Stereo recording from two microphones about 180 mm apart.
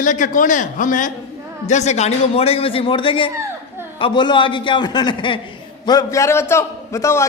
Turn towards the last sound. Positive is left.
turn(degrees=15)  # may be behind; listen again after turning